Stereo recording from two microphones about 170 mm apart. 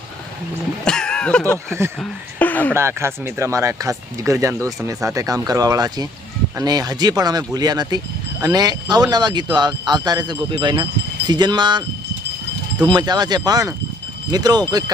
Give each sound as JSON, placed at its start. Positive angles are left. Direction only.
{"t": 0.9, "sound": "speech", "side_deg": 5}
{"t": 2.7, "sound": "speech", "side_deg": -15}
{"t": 12.9, "sound": "speech", "side_deg": -25}